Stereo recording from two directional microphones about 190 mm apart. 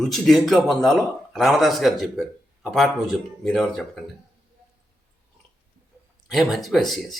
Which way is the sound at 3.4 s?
5° left (ahead or behind).